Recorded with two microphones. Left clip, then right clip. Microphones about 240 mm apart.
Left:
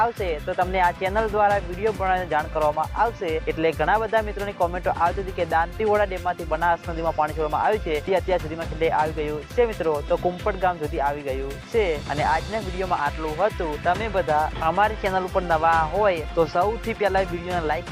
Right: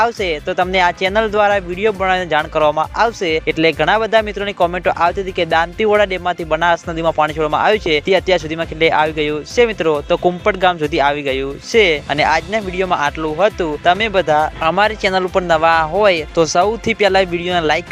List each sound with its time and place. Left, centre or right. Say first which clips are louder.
0.0 s speech: right 7 dB; right